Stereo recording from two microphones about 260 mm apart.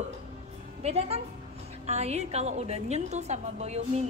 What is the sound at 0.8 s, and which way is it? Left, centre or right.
A woman's voice, right.